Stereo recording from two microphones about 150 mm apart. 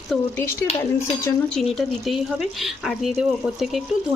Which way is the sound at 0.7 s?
45° left (ahead or behind).